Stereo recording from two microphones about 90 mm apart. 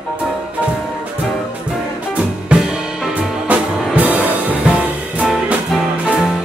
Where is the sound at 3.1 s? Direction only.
15° right (ahead or behind).